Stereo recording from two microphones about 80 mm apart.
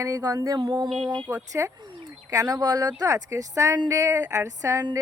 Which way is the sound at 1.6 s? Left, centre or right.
Right.